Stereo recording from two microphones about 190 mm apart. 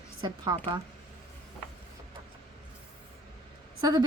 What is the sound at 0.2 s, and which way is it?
Speech, 25° right (ahead or behind).